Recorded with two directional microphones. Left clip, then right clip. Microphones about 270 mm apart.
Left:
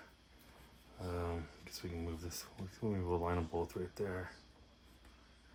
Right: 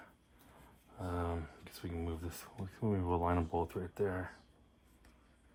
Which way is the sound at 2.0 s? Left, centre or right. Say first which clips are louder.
Right 5 dB; right.